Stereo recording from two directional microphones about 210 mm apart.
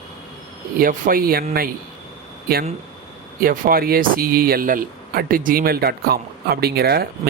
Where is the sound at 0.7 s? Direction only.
45° right (ahead or behind).